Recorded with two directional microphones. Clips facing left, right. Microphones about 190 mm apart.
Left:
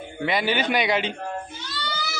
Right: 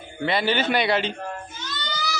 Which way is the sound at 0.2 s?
10° left (ahead or behind).